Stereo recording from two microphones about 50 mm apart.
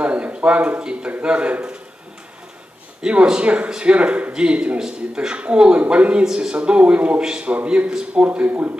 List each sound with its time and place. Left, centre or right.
0.0 s a sound: right
1.2 s speech: right
3.0 s a man's voice: centre; by 8.7 s right